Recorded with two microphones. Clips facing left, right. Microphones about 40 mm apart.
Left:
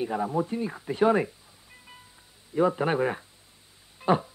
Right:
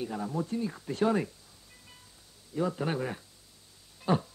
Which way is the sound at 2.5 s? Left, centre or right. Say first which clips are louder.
Left 7 dB; left.